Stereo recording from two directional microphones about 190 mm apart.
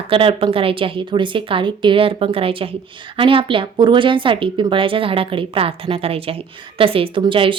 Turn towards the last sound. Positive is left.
turn(degrees=-25)  # may be behind; listen again after turning